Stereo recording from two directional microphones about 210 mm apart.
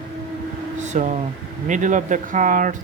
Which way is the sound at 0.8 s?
35° right (ahead or behind).